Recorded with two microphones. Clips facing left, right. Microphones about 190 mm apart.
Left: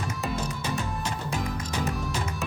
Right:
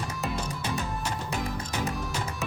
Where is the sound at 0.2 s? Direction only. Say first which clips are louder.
Left 1 dB; centre (ahead or behind).